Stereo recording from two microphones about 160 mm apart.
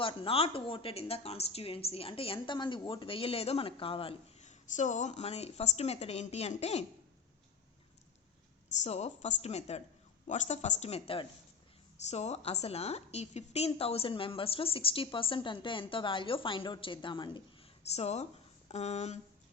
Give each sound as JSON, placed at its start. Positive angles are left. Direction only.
{"t": 0.0, "sound": "a woman's voice", "side_deg": 35}
{"t": 8.8, "sound": "a woman's voice", "side_deg": 40}